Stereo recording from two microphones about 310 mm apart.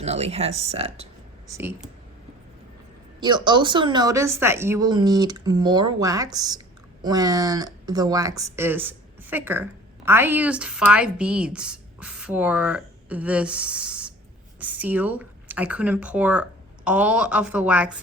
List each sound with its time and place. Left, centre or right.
0.0 s speech: right
1.5 s speech: centre
3.2 s a woman's voice: centre